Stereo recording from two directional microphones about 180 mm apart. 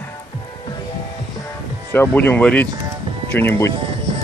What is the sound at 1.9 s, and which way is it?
Speech, 10° left (ahead or behind).